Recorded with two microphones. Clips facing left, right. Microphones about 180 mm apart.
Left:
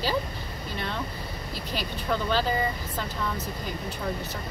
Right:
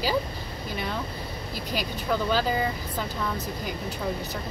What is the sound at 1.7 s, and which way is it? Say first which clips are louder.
Speech: right 2 dB; 5° right (ahead or behind).